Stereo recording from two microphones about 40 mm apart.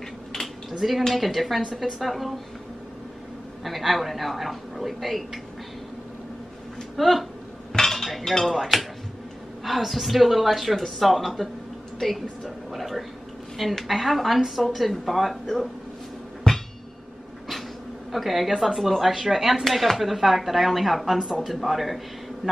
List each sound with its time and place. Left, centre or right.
0.7 s speech: centre
3.6 s speech: centre
7.0 s speech: centre
7.7 s dishes: centre
8.3 s speech: centre
16.5 s music: centre
18.1 s speech: centre
19.6 s speech: centre